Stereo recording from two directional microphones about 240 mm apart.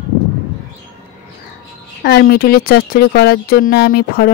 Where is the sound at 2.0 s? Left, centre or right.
Left.